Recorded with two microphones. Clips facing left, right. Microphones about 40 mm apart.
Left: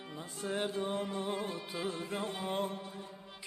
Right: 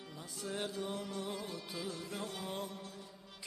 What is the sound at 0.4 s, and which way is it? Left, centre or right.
Music, left.